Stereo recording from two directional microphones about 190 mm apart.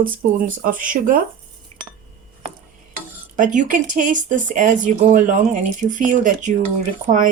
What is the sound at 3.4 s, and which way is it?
Speech, 40° right (ahead or behind).